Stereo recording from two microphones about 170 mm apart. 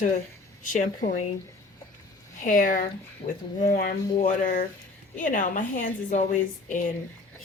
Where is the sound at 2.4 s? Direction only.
50° left (ahead or behind).